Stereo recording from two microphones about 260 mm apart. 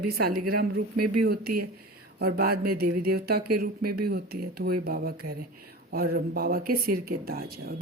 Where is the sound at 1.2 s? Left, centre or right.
Right.